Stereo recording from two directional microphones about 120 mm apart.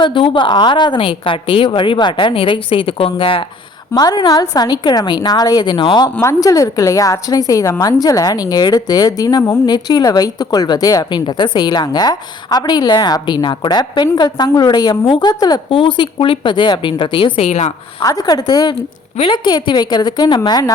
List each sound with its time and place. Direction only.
0.0 s a woman's voice: 45° left (ahead or behind)
3.9 s a woman's voice: 35° left (ahead or behind)
6.1 s a woman's voice: 25° left (ahead or behind)
15.7 s a woman's voice: 45° left (ahead or behind)
17.4 s speech: 70° left (ahead or behind)
18.0 s a woman's voice: 30° left (ahead or behind)